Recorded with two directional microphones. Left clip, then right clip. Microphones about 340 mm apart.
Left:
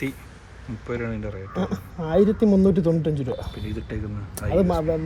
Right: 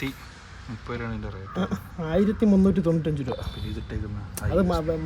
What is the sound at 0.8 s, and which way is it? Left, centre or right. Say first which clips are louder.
Speech: left 5 dB; centre.